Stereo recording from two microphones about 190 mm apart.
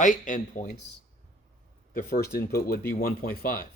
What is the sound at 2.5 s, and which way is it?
Speech, 50° left (ahead or behind).